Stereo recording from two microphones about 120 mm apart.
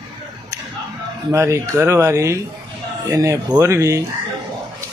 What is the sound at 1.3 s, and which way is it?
Speech, 25° right (ahead or behind).